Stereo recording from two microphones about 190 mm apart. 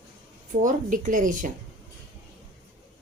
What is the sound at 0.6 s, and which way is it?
Speech, 45° right (ahead or behind).